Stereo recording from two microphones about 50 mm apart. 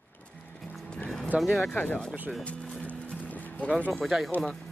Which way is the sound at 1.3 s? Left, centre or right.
Right.